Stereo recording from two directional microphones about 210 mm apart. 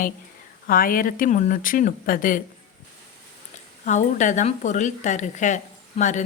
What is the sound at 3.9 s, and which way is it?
A woman's voice, 35° left (ahead or behind).